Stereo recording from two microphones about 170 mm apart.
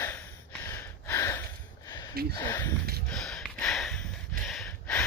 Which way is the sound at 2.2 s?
60° right (ahead or behind).